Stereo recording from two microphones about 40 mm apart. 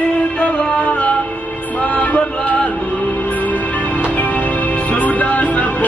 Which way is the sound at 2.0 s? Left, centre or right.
Left.